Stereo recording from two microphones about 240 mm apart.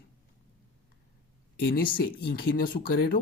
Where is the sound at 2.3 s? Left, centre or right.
Left.